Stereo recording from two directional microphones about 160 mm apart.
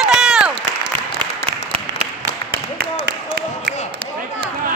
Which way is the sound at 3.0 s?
90° right.